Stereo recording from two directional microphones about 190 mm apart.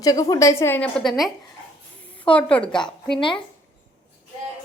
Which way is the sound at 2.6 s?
25° left (ahead or behind).